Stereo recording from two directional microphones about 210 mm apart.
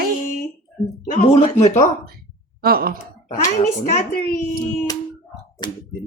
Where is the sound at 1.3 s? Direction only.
30° left (ahead or behind).